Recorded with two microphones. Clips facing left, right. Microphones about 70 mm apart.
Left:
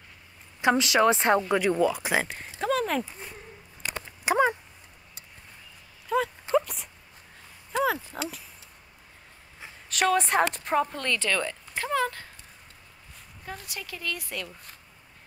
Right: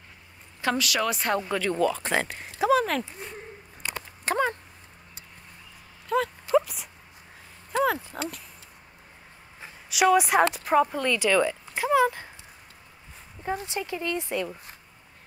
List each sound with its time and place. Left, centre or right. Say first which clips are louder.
0.6 s a woman's voice: left 4 dB; left
1.5 s speech: left 2 dB; centre
4.2 s speech: left 3 dB; centre
6.0 s a sound: right 1 dB; centre
6.5 s dog: right 2 dB; centre
7.7 s a sound: right 2 dB; centre
9.8 s speech: right 4 dB; centre
13.4 s speech: right 9 dB; right